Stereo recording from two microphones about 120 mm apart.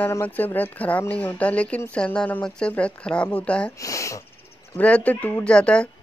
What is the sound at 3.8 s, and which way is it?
Speech, 25° left (ahead or behind).